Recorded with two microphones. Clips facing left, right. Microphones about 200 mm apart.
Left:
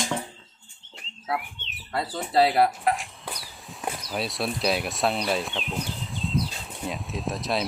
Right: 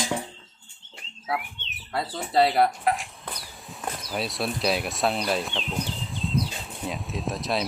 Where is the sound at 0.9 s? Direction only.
Centre (ahead or behind).